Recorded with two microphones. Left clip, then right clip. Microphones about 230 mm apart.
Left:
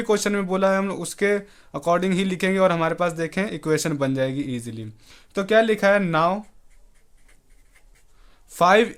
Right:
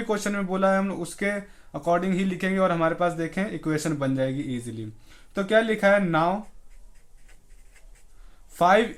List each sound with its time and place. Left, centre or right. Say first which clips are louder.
0.0 s speech: left 5 dB; left
8.5 s speech: left 3 dB; left